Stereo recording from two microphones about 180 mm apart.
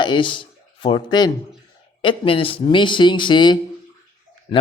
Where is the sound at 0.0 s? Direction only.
25° left (ahead or behind).